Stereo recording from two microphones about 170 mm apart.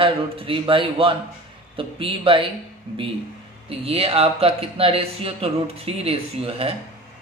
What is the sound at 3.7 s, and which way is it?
Speech, 35° right (ahead or behind).